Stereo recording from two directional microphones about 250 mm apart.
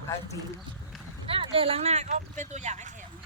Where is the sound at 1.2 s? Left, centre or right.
Right.